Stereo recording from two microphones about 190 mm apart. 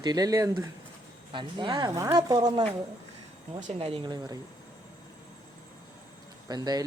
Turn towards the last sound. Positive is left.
turn(degrees=-20)  # may be behind; listen again after turning